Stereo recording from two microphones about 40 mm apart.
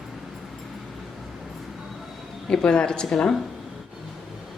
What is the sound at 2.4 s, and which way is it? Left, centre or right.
Speech, centre.